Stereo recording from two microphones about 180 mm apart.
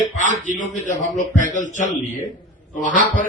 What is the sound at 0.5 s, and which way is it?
A man's voice, 45° left (ahead or behind).